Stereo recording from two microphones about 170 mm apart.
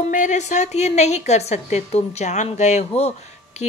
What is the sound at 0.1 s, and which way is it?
Speech, 45° left (ahead or behind).